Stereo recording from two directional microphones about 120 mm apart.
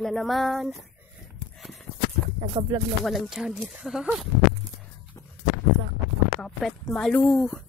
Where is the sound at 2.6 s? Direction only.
35° right (ahead or behind).